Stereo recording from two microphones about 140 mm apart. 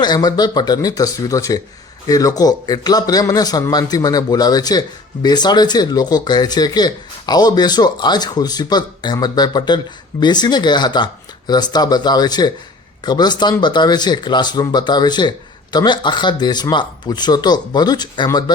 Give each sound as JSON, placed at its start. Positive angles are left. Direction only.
{"t": 0.0, "sound": "speech", "side_deg": 30}